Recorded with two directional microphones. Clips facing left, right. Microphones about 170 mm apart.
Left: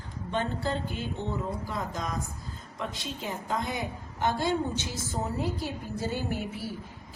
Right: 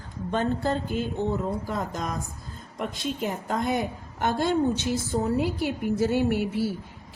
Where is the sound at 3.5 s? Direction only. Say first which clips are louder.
Right 5 dB; 55° right (ahead or behind).